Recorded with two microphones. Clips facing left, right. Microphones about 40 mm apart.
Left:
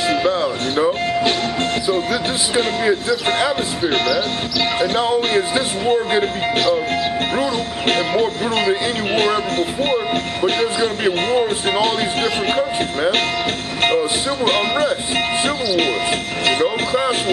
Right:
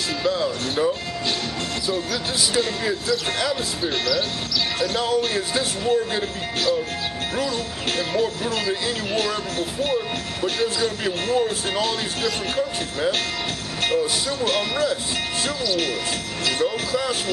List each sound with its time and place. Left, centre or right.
0.1 s music: left
2.5 s speech: left
7.9 s speech: left
13.8 s speech: left